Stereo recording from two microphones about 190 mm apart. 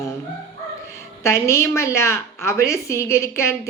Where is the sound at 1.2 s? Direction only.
15° left (ahead or behind).